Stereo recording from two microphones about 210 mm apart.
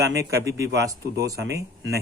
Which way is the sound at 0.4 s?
15° right (ahead or behind).